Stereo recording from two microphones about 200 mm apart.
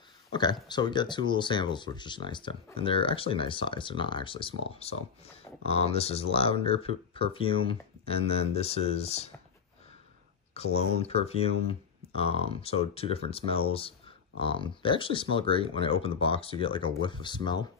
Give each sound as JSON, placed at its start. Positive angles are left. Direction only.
{"t": 0.3, "sound": "speech", "side_deg": 20}
{"t": 10.5, "sound": "speech", "side_deg": 30}